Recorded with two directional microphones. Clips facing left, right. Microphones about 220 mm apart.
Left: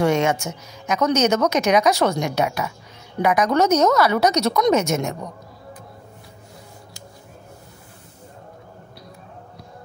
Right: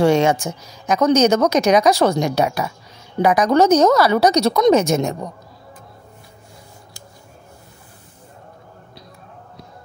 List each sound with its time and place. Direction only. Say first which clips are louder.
0.0 s a woman's voice: right 4 dB; 30° right (ahead or behind)